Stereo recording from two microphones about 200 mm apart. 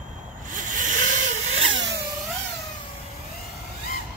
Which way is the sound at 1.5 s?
75° right (ahead or behind).